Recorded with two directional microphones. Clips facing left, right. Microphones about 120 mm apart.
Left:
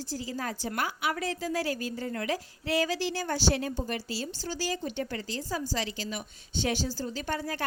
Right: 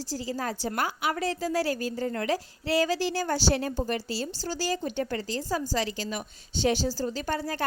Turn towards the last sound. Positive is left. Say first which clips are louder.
# right 3 dB
turn(degrees=-35)  # may be behind; listen again after turning